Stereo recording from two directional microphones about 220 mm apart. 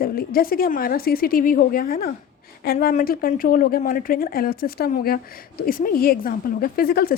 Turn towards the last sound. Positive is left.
turn(degrees=45)  # may be behind; listen again after turning